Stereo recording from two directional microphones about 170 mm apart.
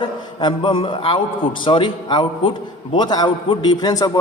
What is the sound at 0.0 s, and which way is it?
A man's voice, 30° left (ahead or behind).